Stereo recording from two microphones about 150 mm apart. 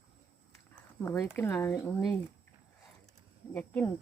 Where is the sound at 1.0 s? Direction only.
15° left (ahead or behind).